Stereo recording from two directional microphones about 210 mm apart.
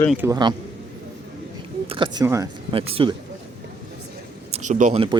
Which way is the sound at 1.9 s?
25° right (ahead or behind).